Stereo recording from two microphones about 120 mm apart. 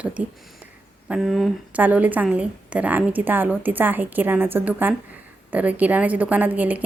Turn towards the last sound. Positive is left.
turn(degrees=-15)  # may be behind; listen again after turning